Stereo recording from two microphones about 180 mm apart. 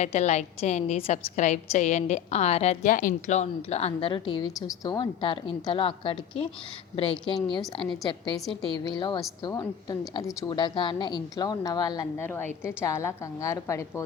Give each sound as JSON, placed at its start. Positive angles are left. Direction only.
{"t": 0.0, "sound": "a woman's voice", "side_deg": 40}
{"t": 8.8, "sound": "a woman's voice", "side_deg": 25}